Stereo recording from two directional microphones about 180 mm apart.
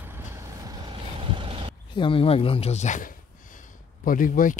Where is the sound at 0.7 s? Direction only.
25° right (ahead or behind).